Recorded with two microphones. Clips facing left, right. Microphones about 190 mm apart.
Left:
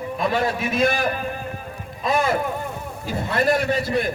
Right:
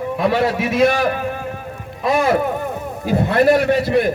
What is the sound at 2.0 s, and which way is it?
A man's voice, 65° right (ahead or behind).